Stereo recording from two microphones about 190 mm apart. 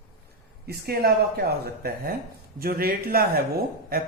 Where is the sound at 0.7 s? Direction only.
55° right (ahead or behind).